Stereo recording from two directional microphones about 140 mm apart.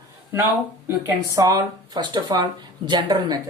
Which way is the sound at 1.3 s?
25° right (ahead or behind).